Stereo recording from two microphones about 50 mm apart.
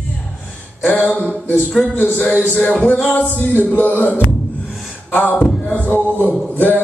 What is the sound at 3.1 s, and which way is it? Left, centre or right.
Music, left.